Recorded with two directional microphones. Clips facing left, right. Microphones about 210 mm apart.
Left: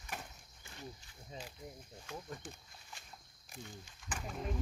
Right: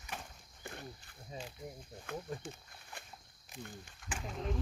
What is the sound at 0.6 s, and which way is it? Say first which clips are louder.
Walk: right 3 dB; 55° right (ahead or behind).